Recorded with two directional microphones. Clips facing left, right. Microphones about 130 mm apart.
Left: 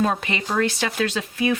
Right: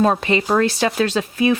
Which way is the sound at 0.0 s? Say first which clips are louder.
Right 6 dB; 35° right (ahead or behind).